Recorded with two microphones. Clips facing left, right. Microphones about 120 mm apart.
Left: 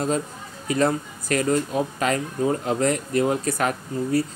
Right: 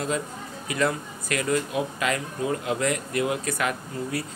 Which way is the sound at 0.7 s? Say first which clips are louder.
Left 4 dB; 35° left (ahead or behind).